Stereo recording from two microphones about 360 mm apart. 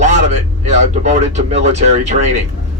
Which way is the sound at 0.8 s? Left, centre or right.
Centre.